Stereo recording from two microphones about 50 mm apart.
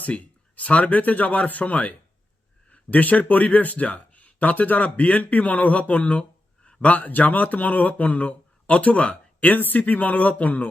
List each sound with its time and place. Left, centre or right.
0.0 s speech: left
9.6 s speech: left